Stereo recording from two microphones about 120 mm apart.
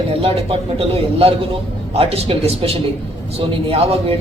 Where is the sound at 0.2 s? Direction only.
55° right (ahead or behind).